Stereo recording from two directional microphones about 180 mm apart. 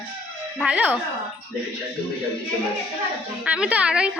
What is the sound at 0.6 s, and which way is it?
Speech, 10° right (ahead or behind).